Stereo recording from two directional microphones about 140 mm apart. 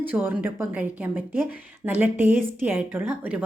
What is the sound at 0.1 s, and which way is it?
A woman's voice, 15° right (ahead or behind).